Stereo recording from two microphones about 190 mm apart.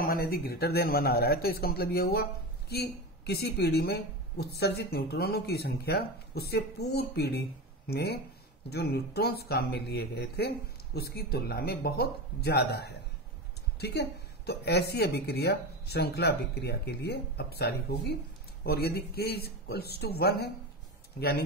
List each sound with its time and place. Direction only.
0.0 s speech: 55° left (ahead or behind)